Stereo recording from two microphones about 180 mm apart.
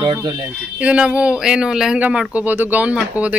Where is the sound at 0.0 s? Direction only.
25° right (ahead or behind).